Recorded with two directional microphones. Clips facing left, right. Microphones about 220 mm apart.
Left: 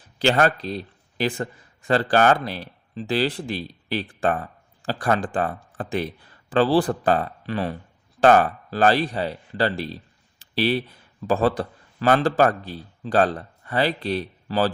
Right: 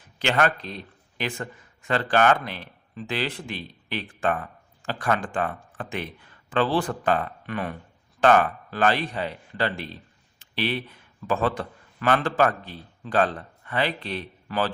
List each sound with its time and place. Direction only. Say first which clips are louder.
0.2 s a man's voice: left 4 dB; 35° left (ahead or behind)